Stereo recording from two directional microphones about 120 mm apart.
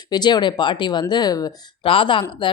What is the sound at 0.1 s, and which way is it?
Speech, 35° left (ahead or behind).